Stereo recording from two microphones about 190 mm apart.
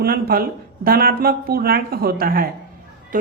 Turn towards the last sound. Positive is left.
turn(degrees=-45)  # may be behind; listen again after turning